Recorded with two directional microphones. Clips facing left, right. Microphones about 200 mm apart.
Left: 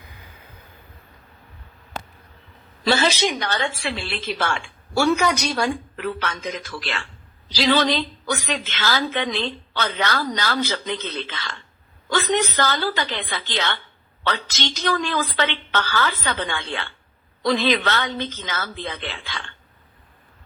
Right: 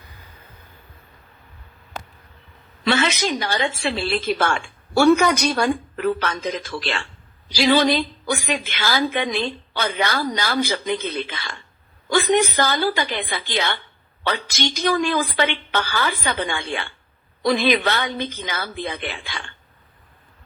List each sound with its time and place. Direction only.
2.8 s a woman's voice: 35° left (ahead or behind)
3.3 s speech: 5° right (ahead or behind)
3.6 s a woman's voice: 25° right (ahead or behind)
7.4 s a woman's voice: 10° right (ahead or behind)